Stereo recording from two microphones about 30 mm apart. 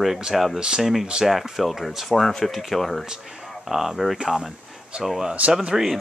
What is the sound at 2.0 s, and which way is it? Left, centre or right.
Speech, centre.